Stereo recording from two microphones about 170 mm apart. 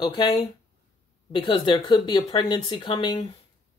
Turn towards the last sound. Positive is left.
turn(degrees=30)  # may be behind; listen again after turning